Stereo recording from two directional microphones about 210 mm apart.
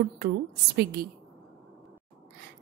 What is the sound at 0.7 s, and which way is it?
Speech, 50° right (ahead or behind).